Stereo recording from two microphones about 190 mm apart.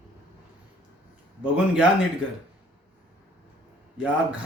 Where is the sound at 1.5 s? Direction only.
5° right (ahead or behind).